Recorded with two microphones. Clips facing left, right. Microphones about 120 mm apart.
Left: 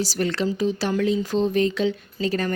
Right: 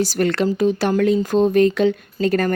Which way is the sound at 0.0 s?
55° right (ahead or behind).